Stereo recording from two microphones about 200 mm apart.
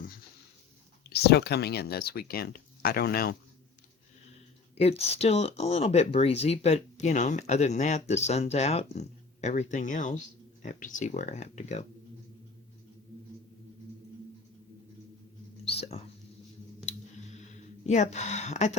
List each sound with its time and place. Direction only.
1.1 s speech: 55° left (ahead or behind)
4.8 s speech: 30° left (ahead or behind)
15.6 s whispering: 30° left (ahead or behind)
17.3 s a sound: 35° left (ahead or behind)